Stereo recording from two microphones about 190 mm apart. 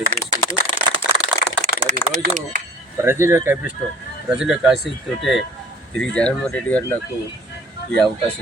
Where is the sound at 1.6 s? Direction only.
40° right (ahead or behind).